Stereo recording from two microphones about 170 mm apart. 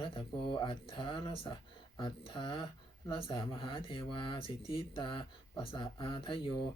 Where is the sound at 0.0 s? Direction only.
30° left (ahead or behind).